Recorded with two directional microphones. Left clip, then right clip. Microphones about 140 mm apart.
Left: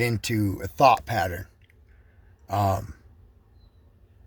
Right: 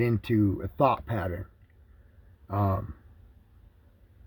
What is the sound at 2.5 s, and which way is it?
Speech, 5° left (ahead or behind).